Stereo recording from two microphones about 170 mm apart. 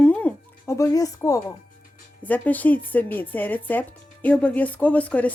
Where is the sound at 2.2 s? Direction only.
10° left (ahead or behind).